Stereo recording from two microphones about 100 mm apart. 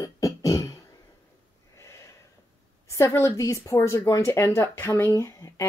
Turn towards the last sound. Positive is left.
turn(degrees=30)  # may be behind; listen again after turning